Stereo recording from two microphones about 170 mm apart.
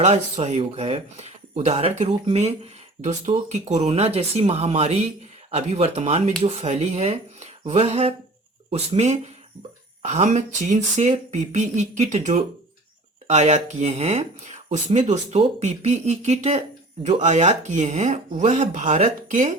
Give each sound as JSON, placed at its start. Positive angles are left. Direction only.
{"t": 0.0, "sound": "speech", "side_deg": -40}